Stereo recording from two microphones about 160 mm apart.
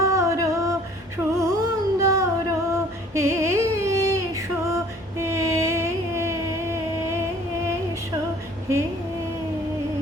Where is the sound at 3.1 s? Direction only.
15° right (ahead or behind).